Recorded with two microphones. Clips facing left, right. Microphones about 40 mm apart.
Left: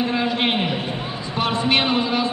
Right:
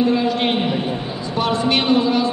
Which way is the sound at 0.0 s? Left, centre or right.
Centre.